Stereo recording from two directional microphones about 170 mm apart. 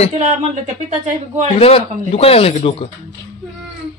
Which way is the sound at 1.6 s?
35° left (ahead or behind).